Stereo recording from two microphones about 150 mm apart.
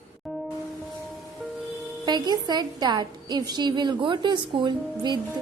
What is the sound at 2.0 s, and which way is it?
A woman's voice, 30° right (ahead or behind).